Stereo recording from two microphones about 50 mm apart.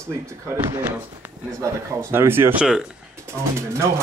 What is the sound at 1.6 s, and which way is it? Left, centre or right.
Speech, right.